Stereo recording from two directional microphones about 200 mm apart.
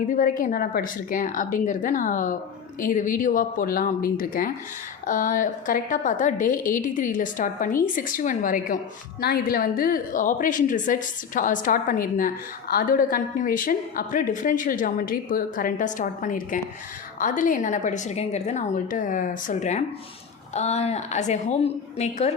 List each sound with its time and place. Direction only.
0.1 s a woman's voice: 40° left (ahead or behind)